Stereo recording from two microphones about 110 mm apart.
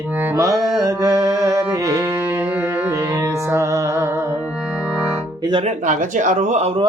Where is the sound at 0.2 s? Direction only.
20° right (ahead or behind).